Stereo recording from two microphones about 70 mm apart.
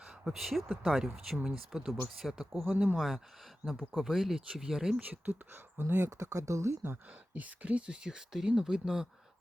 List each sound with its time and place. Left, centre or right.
0.0 s speech: centre
2.7 s speech: centre
3.7 s speech: centre
5.0 s speech: right
6.8 s speech: right; by 9.0 s centre